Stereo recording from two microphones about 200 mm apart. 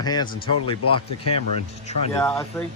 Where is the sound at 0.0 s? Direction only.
20° left (ahead or behind).